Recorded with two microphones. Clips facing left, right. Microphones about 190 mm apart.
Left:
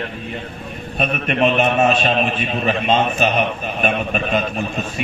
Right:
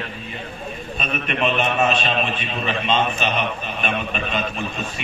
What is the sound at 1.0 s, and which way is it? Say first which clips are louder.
A man's voice: left 6 dB; 40° left (ahead or behind).